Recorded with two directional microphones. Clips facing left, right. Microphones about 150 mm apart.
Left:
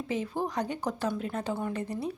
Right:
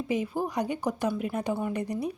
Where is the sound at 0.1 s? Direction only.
10° right (ahead or behind).